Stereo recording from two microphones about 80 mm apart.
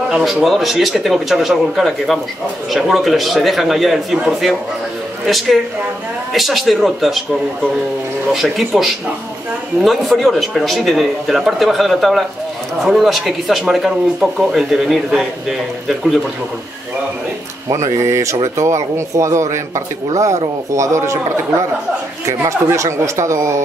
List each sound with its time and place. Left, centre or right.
0.1 s speech: centre
8.3 s speech: centre
17.6 s speech: right
22.4 s speech: right